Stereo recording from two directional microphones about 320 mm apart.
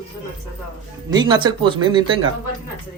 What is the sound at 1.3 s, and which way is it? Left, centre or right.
Speech, centre.